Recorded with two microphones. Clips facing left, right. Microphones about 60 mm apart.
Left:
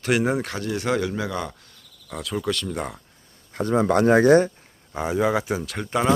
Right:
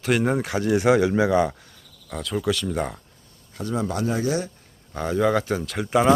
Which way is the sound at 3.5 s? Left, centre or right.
Left.